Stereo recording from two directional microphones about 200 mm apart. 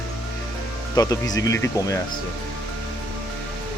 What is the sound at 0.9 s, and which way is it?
Speech, 20° left (ahead or behind).